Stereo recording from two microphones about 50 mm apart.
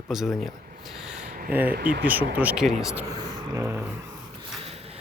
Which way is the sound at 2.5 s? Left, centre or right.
Centre.